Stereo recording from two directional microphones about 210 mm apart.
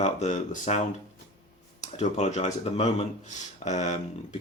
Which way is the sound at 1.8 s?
35° left (ahead or behind).